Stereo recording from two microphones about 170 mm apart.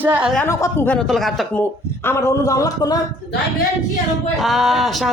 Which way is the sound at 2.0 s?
15° left (ahead or behind).